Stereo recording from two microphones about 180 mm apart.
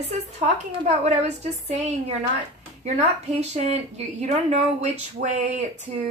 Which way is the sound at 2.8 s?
35° right (ahead or behind).